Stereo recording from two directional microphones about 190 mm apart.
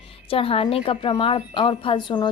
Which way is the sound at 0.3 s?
30° left (ahead or behind).